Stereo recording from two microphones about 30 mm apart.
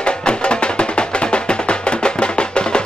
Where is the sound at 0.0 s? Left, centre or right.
Left.